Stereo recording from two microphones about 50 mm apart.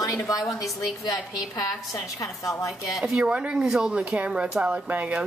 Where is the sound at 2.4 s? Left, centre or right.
Left.